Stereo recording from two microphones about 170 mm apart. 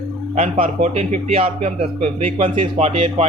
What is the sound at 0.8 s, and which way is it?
A man's voice, 40° right (ahead or behind).